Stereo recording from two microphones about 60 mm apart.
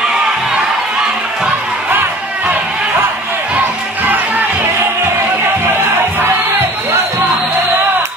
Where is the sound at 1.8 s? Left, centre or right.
Right.